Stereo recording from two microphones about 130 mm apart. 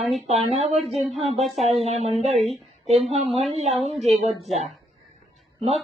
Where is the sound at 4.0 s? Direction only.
Centre (ahead or behind).